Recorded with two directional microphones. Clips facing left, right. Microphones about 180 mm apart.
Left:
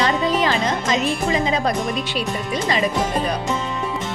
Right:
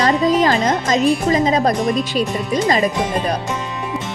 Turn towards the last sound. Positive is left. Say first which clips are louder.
# right 2 dB
turn(degrees=-40)  # may be behind; listen again after turning